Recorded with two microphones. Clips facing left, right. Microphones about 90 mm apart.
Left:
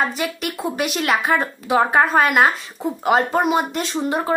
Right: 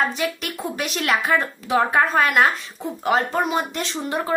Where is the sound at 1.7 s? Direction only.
20° left (ahead or behind).